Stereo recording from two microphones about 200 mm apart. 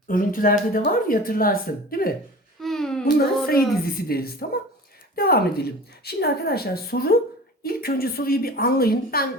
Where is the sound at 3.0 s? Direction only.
50° left (ahead or behind).